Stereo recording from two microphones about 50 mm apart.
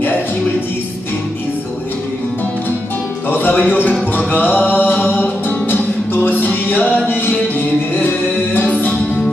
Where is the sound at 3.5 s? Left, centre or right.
Left.